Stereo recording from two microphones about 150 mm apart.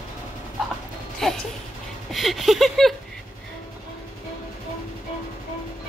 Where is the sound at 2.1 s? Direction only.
Centre (ahead or behind).